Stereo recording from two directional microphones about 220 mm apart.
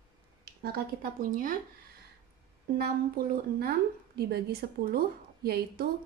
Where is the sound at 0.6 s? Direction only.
45° right (ahead or behind).